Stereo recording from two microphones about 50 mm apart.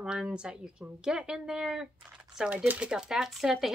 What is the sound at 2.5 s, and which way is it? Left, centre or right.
Speech, right.